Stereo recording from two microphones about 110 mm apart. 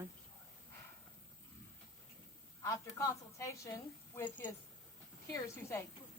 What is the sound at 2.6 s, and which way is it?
A woman's voice, 30° left (ahead or behind).